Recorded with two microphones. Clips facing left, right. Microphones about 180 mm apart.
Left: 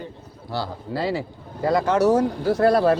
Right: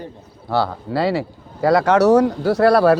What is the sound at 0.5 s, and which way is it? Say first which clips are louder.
Speech: right 8 dB; 70° right (ahead or behind).